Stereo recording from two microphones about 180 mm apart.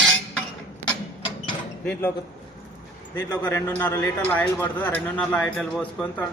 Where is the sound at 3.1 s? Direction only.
10° left (ahead or behind).